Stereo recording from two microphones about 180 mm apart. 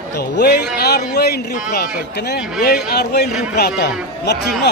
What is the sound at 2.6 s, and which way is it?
Speech, 65° left (ahead or behind).